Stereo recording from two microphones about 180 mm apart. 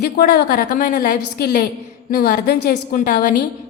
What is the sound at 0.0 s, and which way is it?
A woman's voice, 60° left (ahead or behind).